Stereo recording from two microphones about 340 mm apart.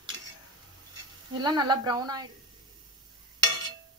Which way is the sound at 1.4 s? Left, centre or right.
Centre.